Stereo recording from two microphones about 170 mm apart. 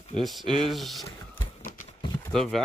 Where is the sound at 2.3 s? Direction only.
5° left (ahead or behind).